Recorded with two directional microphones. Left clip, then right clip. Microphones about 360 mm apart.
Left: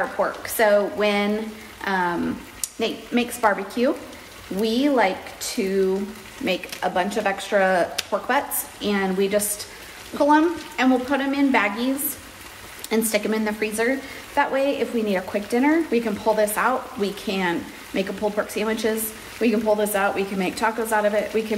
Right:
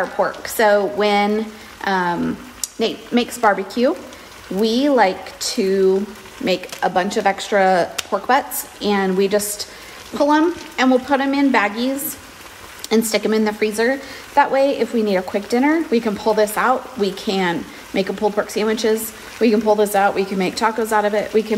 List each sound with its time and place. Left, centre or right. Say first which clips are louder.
0.2 s a woman's voice: right 4 dB; right
6.8 s a woman's voice: right 5 dB; right
12.9 s a woman's voice: right 5 dB; right